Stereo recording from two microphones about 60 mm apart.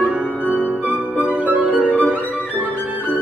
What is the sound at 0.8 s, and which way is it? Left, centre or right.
Music, right.